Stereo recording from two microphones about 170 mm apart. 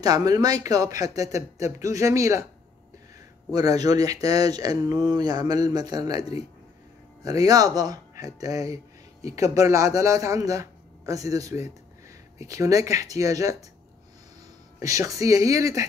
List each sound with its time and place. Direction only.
0.0 s speech: 20° right (ahead or behind)
3.5 s speech: 20° right (ahead or behind)
14.8 s speech: 20° right (ahead or behind)